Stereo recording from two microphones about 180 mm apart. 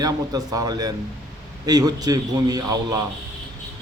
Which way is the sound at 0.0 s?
20° right (ahead or behind).